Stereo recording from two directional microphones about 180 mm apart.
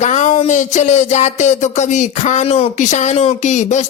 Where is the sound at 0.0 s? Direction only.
40° left (ahead or behind).